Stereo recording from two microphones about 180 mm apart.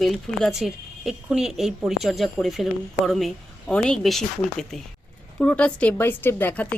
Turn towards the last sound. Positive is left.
turn(degrees=10)  # may be behind; listen again after turning